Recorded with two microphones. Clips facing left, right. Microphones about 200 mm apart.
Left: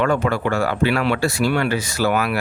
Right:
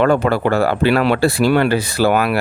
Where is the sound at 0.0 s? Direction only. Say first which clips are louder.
Right 5 dB; 35° right (ahead or behind).